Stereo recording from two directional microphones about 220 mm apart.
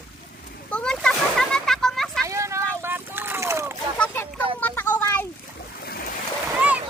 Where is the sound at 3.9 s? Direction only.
10° left (ahead or behind).